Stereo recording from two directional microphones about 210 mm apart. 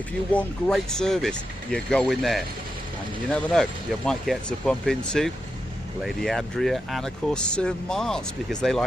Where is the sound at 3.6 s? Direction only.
5° left (ahead or behind).